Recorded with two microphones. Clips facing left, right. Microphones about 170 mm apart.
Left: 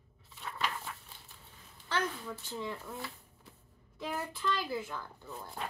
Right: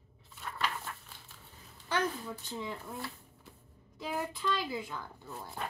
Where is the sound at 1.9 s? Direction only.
20° right (ahead or behind).